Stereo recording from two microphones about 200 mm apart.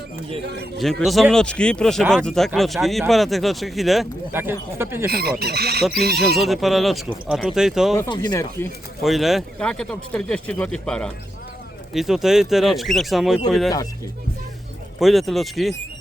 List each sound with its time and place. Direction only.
0.8 s speech: centre (ahead or behind)
4.3 s speech: 10° right (ahead or behind)
5.0 s speech: 50° right (ahead or behind)
6.2 s speech: centre (ahead or behind)
7.9 s speech: 20° left (ahead or behind)
9.0 s speech: centre (ahead or behind)
14.9 s speech: centre (ahead or behind)